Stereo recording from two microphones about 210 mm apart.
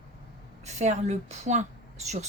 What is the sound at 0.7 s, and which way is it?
Speech, 35° right (ahead or behind).